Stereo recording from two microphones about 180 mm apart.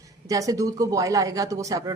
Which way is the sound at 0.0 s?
20° right (ahead or behind).